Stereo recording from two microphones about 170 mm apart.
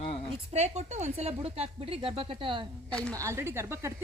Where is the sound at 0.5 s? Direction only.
40° right (ahead or behind).